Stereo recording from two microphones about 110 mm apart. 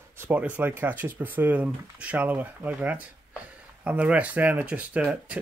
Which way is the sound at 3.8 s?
10° right (ahead or behind).